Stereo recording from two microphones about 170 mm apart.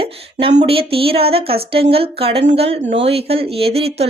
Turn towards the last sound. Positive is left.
turn(degrees=-35)  # may be behind; listen again after turning